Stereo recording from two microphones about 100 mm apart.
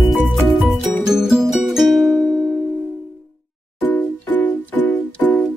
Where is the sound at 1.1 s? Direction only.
Centre (ahead or behind).